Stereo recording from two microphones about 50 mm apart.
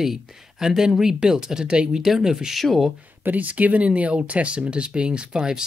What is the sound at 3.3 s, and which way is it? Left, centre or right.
Speech, right.